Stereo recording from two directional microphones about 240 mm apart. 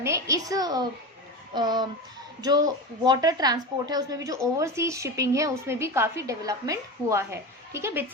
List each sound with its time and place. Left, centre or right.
0.0 s a woman's voice: centre